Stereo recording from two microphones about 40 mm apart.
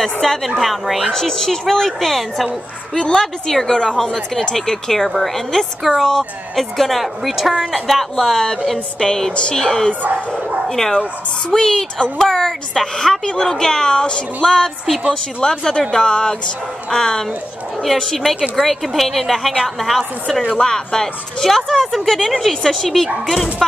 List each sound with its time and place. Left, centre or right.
0.0 s a woman's voice: centre
1.1 s a woman's voice: centre
2.9 s a woman's voice: centre
9.0 s a woman's voice: centre
9.3 s speech: left
9.6 s a woman's voice: centre
14.4 s a woman's voice: centre
20.5 s a woman's voice: centre